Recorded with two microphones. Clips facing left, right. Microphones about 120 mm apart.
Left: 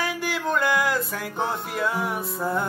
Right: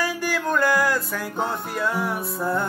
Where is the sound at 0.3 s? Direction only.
20° left (ahead or behind).